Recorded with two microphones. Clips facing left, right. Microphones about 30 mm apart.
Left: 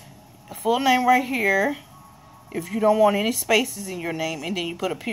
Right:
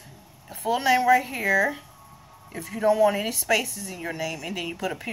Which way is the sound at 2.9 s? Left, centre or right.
Left.